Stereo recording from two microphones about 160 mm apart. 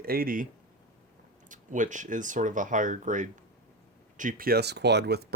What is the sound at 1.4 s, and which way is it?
Speech, 50° right (ahead or behind).